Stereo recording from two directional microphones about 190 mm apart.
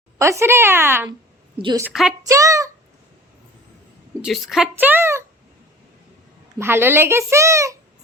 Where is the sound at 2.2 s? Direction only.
15° right (ahead or behind).